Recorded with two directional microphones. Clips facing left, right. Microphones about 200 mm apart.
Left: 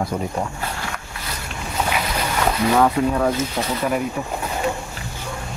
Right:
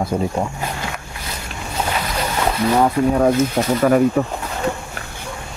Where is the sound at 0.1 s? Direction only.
30° right (ahead or behind).